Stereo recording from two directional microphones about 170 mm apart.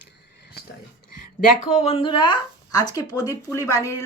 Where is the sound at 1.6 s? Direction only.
40° left (ahead or behind).